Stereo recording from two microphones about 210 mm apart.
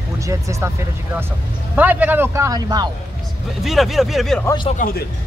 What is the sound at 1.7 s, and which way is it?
Speech, 10° right (ahead or behind).